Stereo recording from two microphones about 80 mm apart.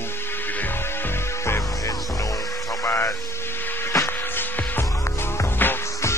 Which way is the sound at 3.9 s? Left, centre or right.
Left.